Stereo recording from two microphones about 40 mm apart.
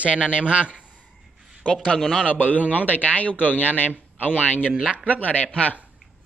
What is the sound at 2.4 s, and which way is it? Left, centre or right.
A man's voice, left.